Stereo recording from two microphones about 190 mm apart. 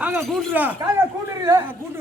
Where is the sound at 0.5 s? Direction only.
10° right (ahead or behind).